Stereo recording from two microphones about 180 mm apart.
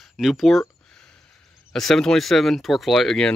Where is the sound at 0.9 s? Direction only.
5° left (ahead or behind).